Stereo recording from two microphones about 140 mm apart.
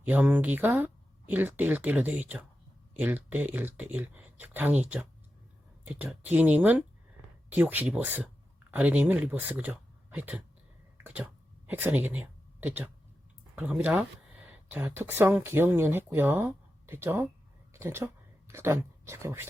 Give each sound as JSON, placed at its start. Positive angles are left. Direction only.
{"t": 0.0, "sound": "speech", "side_deg": -10}
{"t": 11.0, "sound": "a sound", "side_deg": -10}
{"t": 13.6, "sound": "speech", "side_deg": -10}